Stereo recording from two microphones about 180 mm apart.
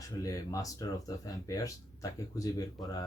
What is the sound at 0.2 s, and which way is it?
Speech, 20° left (ahead or behind).